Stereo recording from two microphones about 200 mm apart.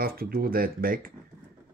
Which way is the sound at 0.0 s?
45° right (ahead or behind).